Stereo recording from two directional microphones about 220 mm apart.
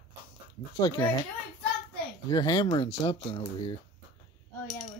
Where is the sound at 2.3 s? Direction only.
20° left (ahead or behind).